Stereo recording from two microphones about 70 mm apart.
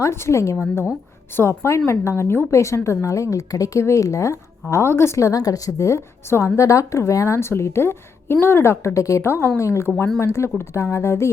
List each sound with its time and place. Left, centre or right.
0.0 s a woman's voice: left